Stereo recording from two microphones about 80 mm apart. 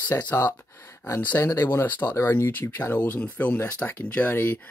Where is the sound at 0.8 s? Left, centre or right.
Left.